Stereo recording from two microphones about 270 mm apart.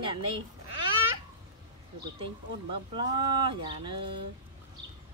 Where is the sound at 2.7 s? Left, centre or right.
Centre.